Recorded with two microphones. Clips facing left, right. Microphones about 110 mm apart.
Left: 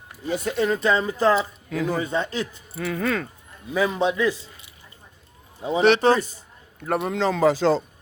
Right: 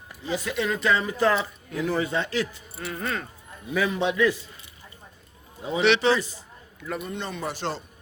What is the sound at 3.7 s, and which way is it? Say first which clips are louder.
Speech: left 2 dB; 30° left (ahead or behind).